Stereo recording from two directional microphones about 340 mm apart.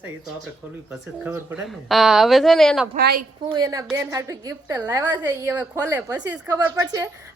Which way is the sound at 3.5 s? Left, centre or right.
Centre.